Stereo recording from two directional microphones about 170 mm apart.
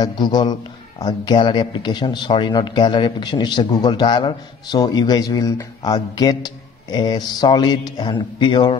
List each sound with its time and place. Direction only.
0.0 s a man's voice: 25° left (ahead or behind)